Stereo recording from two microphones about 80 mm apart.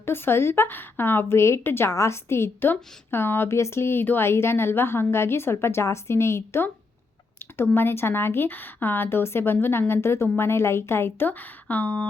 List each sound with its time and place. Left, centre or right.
0.0 s a woman's voice: left